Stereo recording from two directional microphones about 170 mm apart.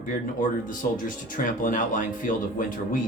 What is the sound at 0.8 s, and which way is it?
Speech, 60° left (ahead or behind).